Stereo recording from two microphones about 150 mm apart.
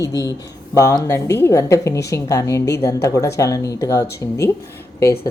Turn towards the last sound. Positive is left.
turn(degrees=15)  # may be behind; listen again after turning